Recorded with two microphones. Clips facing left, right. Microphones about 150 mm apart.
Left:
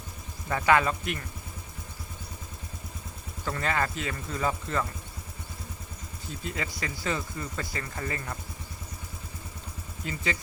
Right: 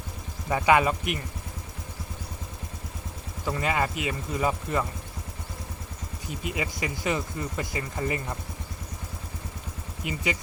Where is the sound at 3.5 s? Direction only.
10° right (ahead or behind).